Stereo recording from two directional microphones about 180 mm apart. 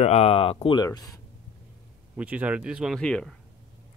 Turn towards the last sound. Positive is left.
turn(degrees=5)  # may be behind; listen again after turning